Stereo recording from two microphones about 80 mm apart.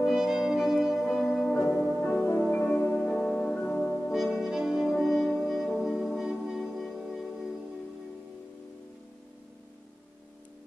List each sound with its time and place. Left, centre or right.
0.0 s music: centre
2.0 s music: centre
4.1 s brass instrument: centre